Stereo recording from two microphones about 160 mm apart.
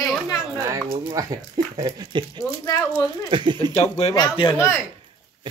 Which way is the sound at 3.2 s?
30° right (ahead or behind).